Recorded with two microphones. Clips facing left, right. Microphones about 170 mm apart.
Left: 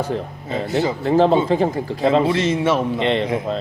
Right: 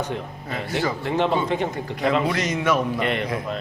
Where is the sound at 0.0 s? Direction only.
35° left (ahead or behind).